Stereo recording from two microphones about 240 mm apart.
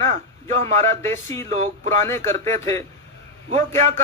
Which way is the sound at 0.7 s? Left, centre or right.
Right.